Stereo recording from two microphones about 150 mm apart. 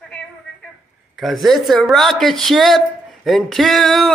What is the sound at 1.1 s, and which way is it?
Speech, centre (ahead or behind).